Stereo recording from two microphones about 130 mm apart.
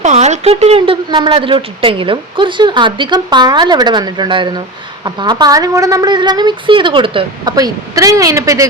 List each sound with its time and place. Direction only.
0.0 s a sound: 60° right (ahead or behind)
1.3 s speech: 45° right (ahead or behind)
7.4 s speech: 30° right (ahead or behind)